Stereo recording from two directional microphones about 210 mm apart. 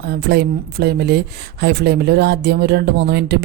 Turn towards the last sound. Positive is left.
turn(degrees=-50)  # may be behind; listen again after turning